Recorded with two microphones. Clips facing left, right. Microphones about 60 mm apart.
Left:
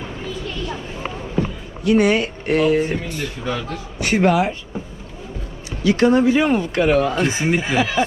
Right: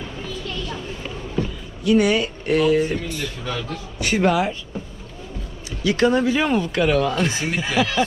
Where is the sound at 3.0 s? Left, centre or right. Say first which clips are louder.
Left 2 dB; left.